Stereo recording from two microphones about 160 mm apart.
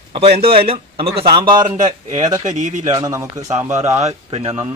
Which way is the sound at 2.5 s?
50° right (ahead or behind).